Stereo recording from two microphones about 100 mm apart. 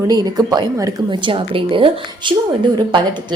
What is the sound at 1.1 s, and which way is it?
A woman's voice, 55° right (ahead or behind).